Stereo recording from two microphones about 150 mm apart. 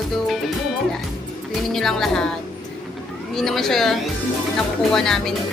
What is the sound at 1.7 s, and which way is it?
Speech, 5° left (ahead or behind).